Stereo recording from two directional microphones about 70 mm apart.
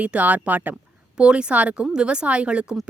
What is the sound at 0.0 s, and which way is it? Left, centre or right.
A woman's voice, right.